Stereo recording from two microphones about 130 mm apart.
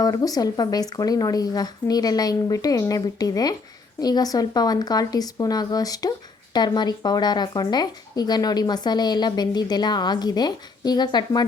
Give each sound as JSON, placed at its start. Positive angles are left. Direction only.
{"t": 0.0, "sound": "speech", "side_deg": 30}